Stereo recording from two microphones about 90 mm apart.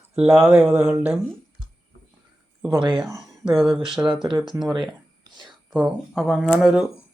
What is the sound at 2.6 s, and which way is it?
Speech, 65° right (ahead or behind).